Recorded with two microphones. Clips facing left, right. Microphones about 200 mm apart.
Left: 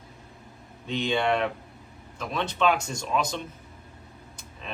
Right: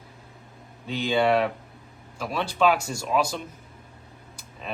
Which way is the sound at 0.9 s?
5° right (ahead or behind).